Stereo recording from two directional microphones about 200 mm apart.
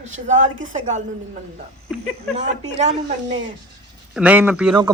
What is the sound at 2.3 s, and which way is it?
Speech, 35° right (ahead or behind).